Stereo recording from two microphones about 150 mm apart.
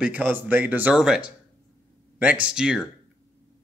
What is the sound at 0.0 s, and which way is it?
Speech, 10° right (ahead or behind).